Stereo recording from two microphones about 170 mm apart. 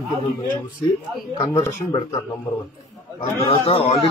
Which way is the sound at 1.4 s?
20° left (ahead or behind).